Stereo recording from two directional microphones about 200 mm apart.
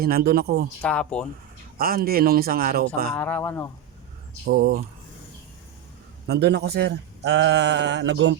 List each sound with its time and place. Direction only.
0.0 s speech: 50° right (ahead or behind)
0.8 s speech: 5° left (ahead or behind)
1.8 s speech: 45° right (ahead or behind)
3.2 s speech: 5° left (ahead or behind)
4.4 s speech: 50° right (ahead or behind)
6.2 s speech: 55° right (ahead or behind)